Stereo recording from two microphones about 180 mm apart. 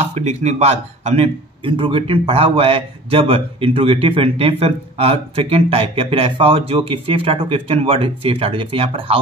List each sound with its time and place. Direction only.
0.0 s speech: 40° right (ahead or behind)